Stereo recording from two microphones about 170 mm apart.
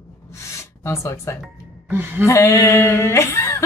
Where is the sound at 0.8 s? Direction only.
15° left (ahead or behind).